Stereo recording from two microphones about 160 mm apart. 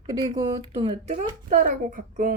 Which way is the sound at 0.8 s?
40° right (ahead or behind).